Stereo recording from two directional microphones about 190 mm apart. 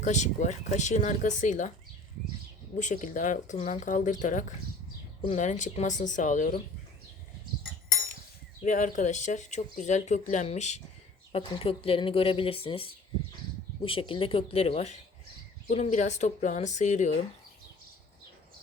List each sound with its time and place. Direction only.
0.0 s speech: 40° left (ahead or behind)
2.7 s speech: 40° left (ahead or behind)
8.6 s speech: 40° left (ahead or behind)